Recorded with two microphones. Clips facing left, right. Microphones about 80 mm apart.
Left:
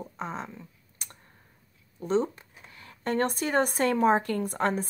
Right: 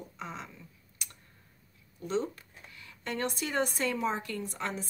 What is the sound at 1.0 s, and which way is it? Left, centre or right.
Clicking, left.